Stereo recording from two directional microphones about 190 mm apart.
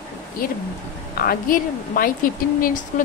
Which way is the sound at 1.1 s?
50° left (ahead or behind).